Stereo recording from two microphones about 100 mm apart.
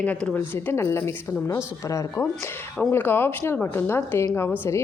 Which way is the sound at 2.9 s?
20° left (ahead or behind).